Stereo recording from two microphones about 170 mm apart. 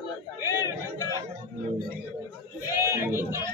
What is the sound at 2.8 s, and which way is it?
Speech, 15° right (ahead or behind).